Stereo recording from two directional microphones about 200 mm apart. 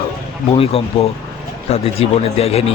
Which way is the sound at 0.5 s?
30° left (ahead or behind).